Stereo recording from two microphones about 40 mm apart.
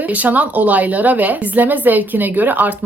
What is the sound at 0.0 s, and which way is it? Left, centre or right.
A woman's voice, right.